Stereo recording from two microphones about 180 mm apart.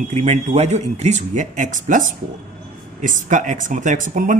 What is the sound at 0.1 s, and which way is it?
Speech, 40° right (ahead or behind).